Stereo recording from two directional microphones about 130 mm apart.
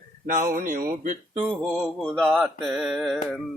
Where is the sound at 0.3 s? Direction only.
90° right.